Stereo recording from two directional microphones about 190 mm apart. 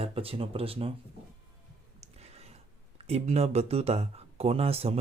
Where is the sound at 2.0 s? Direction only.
35° right (ahead or behind).